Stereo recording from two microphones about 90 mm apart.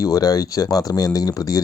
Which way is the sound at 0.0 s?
45° left (ahead or behind).